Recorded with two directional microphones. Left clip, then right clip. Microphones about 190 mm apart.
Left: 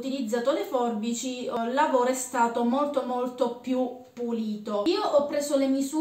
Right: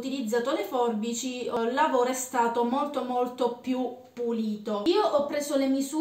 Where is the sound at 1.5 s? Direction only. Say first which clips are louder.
Even; 10° right (ahead or behind).